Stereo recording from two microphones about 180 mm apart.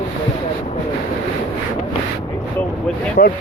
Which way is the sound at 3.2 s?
55° left (ahead or behind).